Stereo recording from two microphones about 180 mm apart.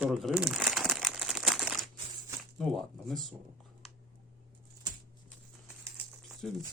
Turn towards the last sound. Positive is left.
turn(degrees=0)  # may be behind; listen again after turning